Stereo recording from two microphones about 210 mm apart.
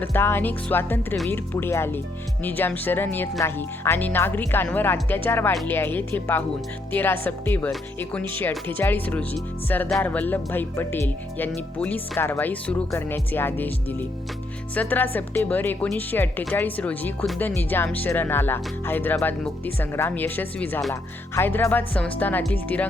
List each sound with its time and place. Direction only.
0.0 s speech: 10° left (ahead or behind)